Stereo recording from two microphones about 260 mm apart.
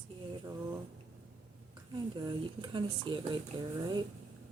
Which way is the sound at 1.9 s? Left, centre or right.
Centre.